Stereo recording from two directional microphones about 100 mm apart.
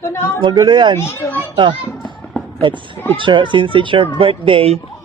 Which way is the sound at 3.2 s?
55° right (ahead or behind).